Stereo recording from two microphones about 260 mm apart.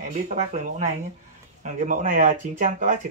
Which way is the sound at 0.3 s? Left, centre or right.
Right.